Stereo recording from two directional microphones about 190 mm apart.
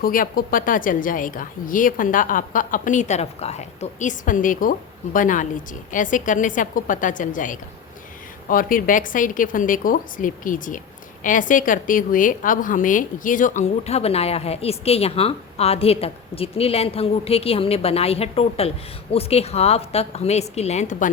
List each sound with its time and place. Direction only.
0.0 s a woman's voice: 50° left (ahead or behind)